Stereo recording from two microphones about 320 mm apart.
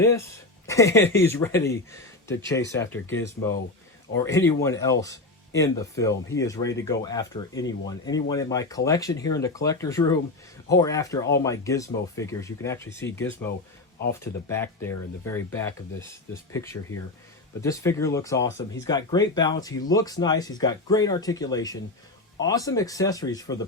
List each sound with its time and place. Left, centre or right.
0.0 s speech: centre